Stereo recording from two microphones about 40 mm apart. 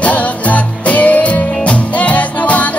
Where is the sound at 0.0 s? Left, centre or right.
Left.